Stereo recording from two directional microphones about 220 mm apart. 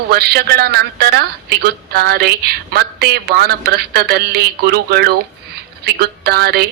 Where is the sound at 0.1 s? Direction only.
45° right (ahead or behind).